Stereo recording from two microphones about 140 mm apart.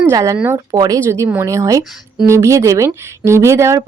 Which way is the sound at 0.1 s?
25° right (ahead or behind).